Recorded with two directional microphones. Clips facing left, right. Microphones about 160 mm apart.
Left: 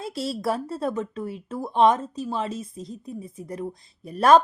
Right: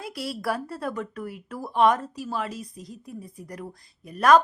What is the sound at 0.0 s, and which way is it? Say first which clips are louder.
Speech: left 3 dB; 25° left (ahead or behind).